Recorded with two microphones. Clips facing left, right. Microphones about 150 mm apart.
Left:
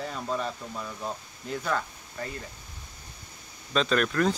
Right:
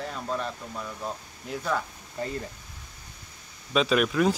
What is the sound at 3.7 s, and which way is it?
Speech, 5° right (ahead or behind).